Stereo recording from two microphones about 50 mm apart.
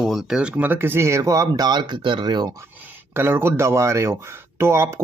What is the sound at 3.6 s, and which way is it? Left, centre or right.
Speech, right.